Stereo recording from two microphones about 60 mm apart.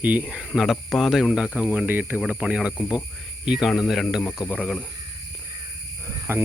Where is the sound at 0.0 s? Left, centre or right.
Right.